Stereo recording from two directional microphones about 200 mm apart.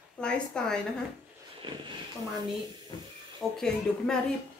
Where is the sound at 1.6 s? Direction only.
25° right (ahead or behind).